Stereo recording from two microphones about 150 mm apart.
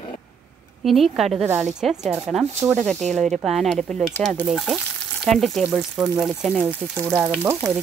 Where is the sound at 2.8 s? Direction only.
Centre (ahead or behind).